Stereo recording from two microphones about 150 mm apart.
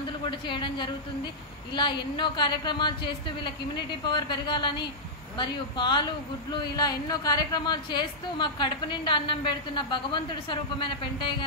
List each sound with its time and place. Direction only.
0.3 s a woman's voice: 30° left (ahead or behind)